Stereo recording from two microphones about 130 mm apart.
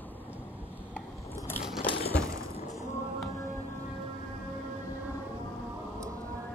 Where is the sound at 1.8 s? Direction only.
40° left (ahead or behind).